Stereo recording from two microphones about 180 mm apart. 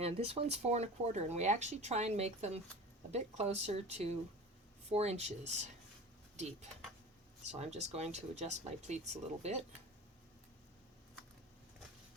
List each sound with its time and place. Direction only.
0.0 s speech: 35° right (ahead or behind)